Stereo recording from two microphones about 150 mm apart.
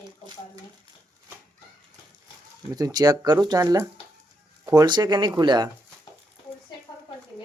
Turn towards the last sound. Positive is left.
turn(degrees=-30)  # may be behind; listen again after turning